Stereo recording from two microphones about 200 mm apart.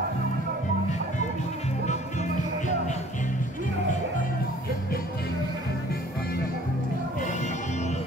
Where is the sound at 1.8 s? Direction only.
35° left (ahead or behind).